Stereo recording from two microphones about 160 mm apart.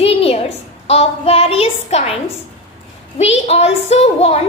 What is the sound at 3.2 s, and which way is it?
A woman's voice, 40° left (ahead or behind).